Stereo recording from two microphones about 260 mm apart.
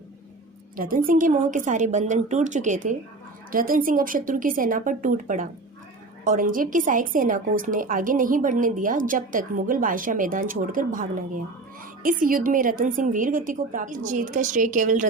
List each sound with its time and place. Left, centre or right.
0.8 s a woman's voice: right
12.0 s a woman's voice: right